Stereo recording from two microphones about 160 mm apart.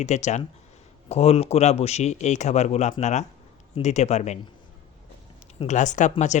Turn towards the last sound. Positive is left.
turn(degrees=50)  # may be behind; listen again after turning